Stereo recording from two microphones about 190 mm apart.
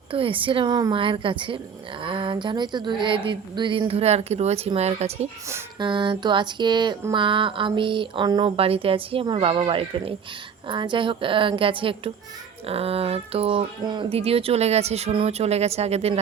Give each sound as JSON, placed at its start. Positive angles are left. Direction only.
{"t": 0.1, "sound": "speech", "side_deg": -25}